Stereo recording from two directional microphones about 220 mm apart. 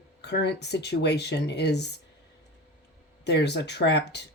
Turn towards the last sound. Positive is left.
turn(degrees=50)  # may be behind; listen again after turning